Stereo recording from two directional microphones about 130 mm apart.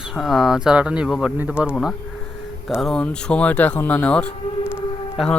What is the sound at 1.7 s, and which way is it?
Speech, 5° left (ahead or behind).